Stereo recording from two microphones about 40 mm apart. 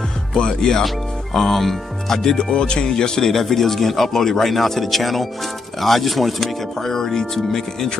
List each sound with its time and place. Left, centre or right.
0.3 s speech: centre
2.5 s speech: left